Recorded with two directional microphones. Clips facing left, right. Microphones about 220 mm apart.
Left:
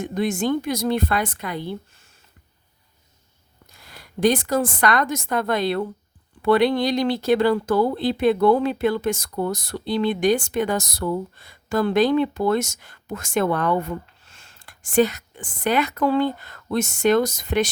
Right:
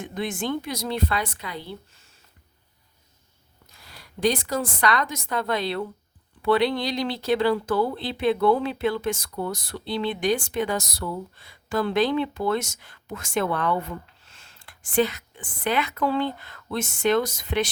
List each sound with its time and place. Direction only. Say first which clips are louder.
0.0 s speech: left 6 dB; 45° left (ahead or behind)
4.2 s a woman's voice: left 5 dB; 50° left (ahead or behind)